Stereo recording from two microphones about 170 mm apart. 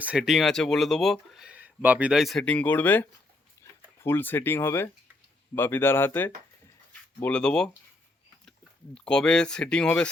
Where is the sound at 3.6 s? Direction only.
15° left (ahead or behind).